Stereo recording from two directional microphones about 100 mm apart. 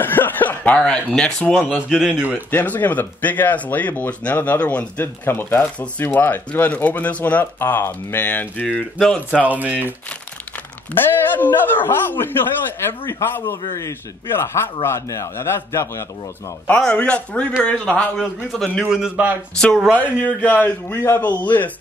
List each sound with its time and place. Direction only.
0.0 s chuckle: 20° left (ahead or behind)
1.1 s speech: 10° left (ahead or behind)
1.9 s a man's voice: 5° right (ahead or behind)
2.5 s speech: 15° left (ahead or behind)
9.0 s speech: 5° left (ahead or behind)
9.4 s a man's voice: 15° right (ahead or behind)
11.1 s speech: 20° left (ahead or behind)
13.5 s speech: 30° left (ahead or behind)
16.8 s speech: 10° left (ahead or behind)
18.9 s a man's voice: 10° right (ahead or behind)
19.6 s speech: 5° left (ahead or behind)
20.0 s speech: 15° left (ahead or behind)